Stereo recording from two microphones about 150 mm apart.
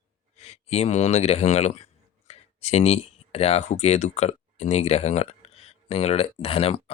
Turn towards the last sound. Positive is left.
turn(degrees=40)  # may be behind; listen again after turning